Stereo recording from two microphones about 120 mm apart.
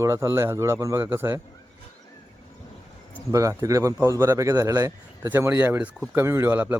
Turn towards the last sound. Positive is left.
turn(degrees=-15)  # may be behind; listen again after turning